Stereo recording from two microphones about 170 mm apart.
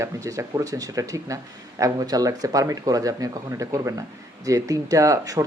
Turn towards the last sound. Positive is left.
turn(degrees=-20)  # may be behind; listen again after turning